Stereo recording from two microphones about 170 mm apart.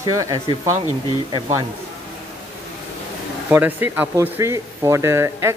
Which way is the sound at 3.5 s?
10° right (ahead or behind).